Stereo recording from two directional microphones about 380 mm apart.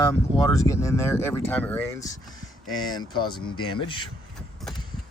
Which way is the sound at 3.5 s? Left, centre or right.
Left.